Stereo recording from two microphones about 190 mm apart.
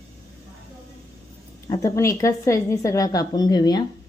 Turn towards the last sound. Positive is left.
turn(degrees=20)  # may be behind; listen again after turning